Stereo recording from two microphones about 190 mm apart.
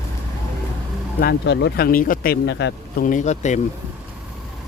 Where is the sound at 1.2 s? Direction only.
65° left (ahead or behind).